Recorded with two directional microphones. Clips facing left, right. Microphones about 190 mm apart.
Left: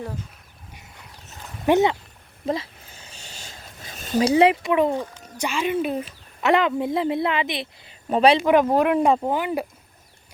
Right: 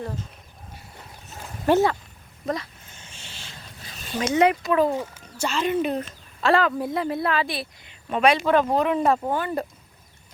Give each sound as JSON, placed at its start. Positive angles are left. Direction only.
{"t": 1.6, "sound": "speech", "side_deg": 20}
{"t": 2.5, "sound": "a sound", "side_deg": 30}
{"t": 5.4, "sound": "speech", "side_deg": 10}
{"t": 6.4, "sound": "a woman's voice", "side_deg": 20}
{"t": 7.9, "sound": "a sound", "side_deg": 35}
{"t": 8.4, "sound": "speech", "side_deg": 10}